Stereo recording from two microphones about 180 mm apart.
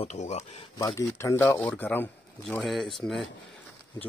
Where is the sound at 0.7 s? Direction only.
20° left (ahead or behind); by 3.2 s centre (ahead or behind).